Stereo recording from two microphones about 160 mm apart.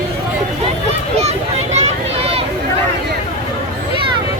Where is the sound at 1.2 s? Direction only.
40° right (ahead or behind).